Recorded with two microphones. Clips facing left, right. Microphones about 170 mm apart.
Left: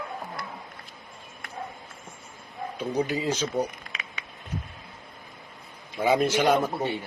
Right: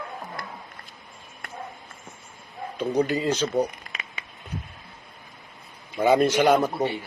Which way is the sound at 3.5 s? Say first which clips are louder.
Right 3 dB; 5° right (ahead or behind).